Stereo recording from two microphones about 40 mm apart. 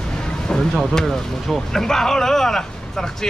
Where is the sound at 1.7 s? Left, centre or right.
Centre.